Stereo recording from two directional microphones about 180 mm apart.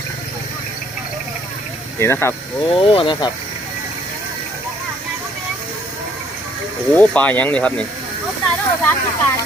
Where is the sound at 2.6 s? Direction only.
30° left (ahead or behind).